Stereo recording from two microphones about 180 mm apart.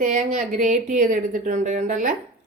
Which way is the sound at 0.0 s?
40° right (ahead or behind).